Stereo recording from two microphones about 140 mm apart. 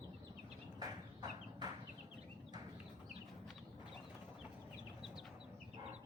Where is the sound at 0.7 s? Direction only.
30° right (ahead or behind).